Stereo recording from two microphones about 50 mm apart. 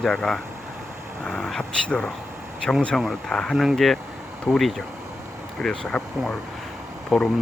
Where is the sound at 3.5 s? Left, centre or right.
Centre.